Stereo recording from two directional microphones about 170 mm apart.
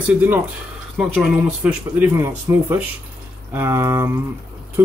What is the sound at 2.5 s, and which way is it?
A man's voice, 20° right (ahead or behind).